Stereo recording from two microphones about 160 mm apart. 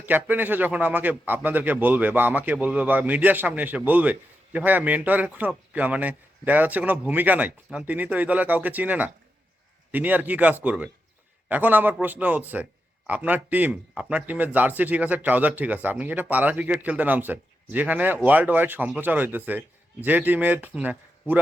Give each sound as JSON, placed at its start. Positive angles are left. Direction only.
{"t": 0.0, "sound": "a man's voice", "side_deg": -10}